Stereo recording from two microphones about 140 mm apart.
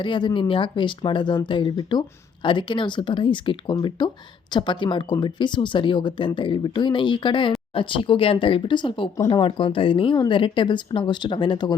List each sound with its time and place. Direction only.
0.0 s a woman's voice: 35° left (ahead or behind)